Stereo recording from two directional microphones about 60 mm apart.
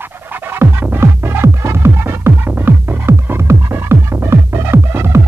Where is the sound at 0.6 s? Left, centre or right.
Right.